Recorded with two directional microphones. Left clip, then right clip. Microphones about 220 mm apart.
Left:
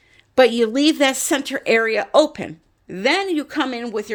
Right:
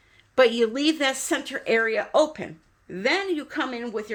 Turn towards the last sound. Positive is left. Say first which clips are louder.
# left 5 dB
turn(degrees=55)  # may be behind; listen again after turning